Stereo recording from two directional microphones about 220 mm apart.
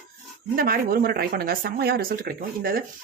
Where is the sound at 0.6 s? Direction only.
40° right (ahead or behind).